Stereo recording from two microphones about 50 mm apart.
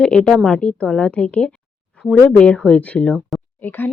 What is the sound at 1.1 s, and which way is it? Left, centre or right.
Speech, left.